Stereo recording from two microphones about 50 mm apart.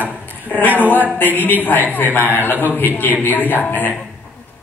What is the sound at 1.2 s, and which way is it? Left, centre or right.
A woman's voice, left.